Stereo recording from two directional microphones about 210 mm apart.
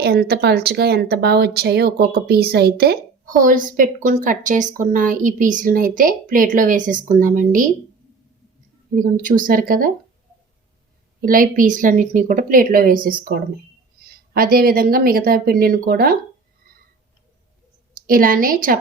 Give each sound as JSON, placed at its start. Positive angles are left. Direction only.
{"t": 0.0, "sound": "a woman's voice", "side_deg": -50}
{"t": 9.0, "sound": "a woman's voice", "side_deg": -40}
{"t": 11.3, "sound": "a woman's voice", "side_deg": -40}
{"t": 18.0, "sound": "a woman's voice", "side_deg": -40}